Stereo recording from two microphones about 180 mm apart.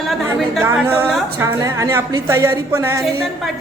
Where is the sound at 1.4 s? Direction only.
15° right (ahead or behind).